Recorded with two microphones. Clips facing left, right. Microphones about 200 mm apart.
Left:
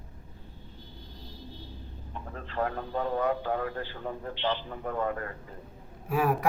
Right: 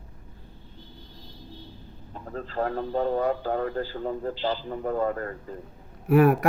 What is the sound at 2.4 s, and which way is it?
A man's voice, 35° right (ahead or behind).